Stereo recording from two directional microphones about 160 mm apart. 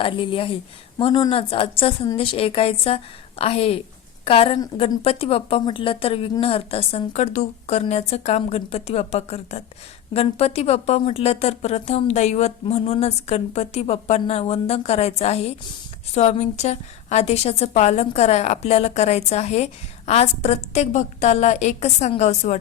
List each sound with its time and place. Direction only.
0.0 s a woman's voice: 35° left (ahead or behind)